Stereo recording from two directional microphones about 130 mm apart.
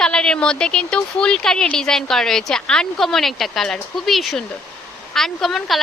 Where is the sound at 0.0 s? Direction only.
5° left (ahead or behind).